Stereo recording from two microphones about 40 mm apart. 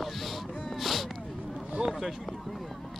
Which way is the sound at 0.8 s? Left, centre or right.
Centre.